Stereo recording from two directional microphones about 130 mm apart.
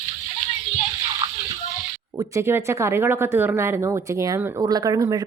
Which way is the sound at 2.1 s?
25° right (ahead or behind).